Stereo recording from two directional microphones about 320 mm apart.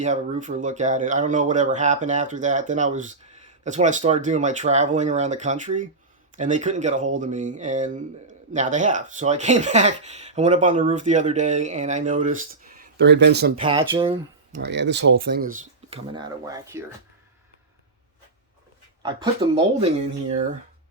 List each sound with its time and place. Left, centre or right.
0.0 s speech: right
13.6 s speech: centre
14.6 s speech: right; by 16.8 s centre
19.0 s speech: centre